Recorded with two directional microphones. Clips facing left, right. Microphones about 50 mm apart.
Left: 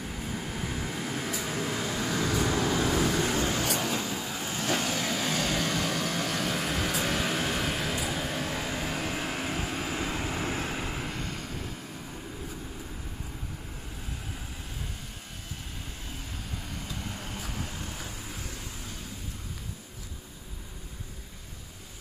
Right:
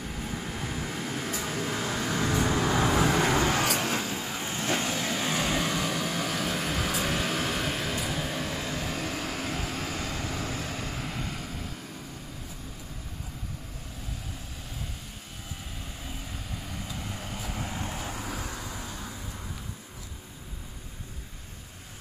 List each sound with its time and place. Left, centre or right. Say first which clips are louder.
0.0 s vehicle: even; centre
2.2 s vehicle: right 2 dB; right
2.5 s vehicle: right 1 dB; centre
2.8 s vehicle: right 2 dB; right
3.2 s vehicle: right 3 dB; right
4.0 s vehicle: right 1 dB; centre
4.6 s vehicle: even; centre
5.0 s vehicle: right 1 dB; centre; by 10.8 s left
10.8 s vehicle: left 1 dB; centre
16.6 s vehicle: right 1 dB; centre